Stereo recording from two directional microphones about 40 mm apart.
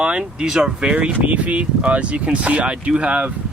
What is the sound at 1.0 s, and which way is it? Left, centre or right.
Speech, right.